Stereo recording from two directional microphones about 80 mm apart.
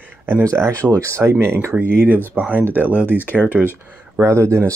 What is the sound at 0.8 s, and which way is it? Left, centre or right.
Speech, right.